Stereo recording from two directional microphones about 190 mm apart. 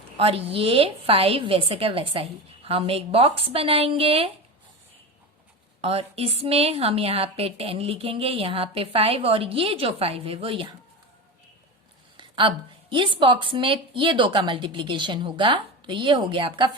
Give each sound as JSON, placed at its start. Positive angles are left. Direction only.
{"t": 0.2, "sound": "a woman's voice", "side_deg": -30}
{"t": 5.8, "sound": "a woman's voice", "side_deg": -30}
{"t": 12.1, "sound": "a woman's voice", "side_deg": -25}